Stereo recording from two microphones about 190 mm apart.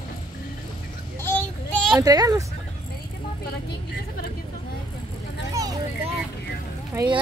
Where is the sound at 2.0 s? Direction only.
20° right (ahead or behind).